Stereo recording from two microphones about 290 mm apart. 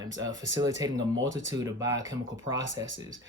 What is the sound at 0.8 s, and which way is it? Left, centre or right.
Speech, centre.